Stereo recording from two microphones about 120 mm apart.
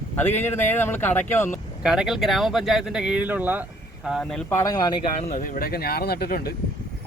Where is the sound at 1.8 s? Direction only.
5° right (ahead or behind).